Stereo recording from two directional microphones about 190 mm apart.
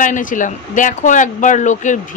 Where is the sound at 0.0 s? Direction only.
45° left (ahead or behind).